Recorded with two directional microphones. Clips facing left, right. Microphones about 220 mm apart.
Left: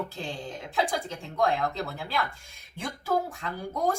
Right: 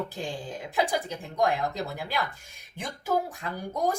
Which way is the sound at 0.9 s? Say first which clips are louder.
Right 1 dB; 15° right (ahead or behind).